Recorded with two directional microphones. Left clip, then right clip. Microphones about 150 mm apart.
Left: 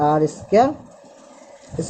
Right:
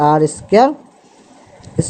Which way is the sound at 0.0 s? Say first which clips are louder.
Right 5 dB; 60° right (ahead or behind).